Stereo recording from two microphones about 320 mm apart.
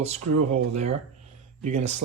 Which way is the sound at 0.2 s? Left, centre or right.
Right.